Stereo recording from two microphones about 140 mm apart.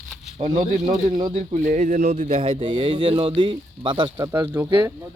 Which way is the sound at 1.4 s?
60° right (ahead or behind).